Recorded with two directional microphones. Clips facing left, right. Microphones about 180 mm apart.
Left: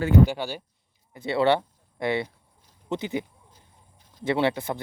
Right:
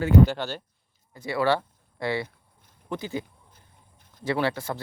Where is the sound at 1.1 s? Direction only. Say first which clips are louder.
Left 3 dB; 25° left (ahead or behind).